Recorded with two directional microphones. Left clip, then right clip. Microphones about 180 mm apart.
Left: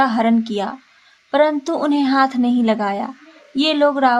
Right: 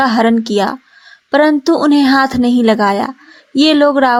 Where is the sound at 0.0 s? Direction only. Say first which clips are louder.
Right 4 dB; 35° right (ahead or behind).